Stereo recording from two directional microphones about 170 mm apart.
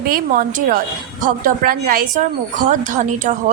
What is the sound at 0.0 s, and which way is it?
A woman's voice, 55° right (ahead or behind).